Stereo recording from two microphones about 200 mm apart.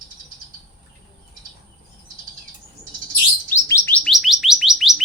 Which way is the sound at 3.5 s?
15° left (ahead or behind).